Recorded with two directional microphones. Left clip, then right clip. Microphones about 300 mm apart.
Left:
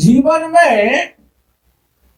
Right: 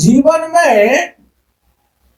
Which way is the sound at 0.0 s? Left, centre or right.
Centre.